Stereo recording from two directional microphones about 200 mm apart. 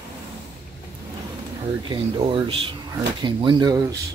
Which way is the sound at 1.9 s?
25° right (ahead or behind).